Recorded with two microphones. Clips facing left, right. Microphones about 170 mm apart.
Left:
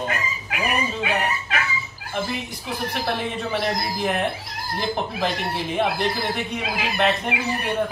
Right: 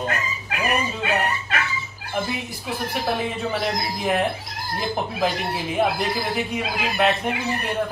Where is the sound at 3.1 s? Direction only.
Centre (ahead or behind).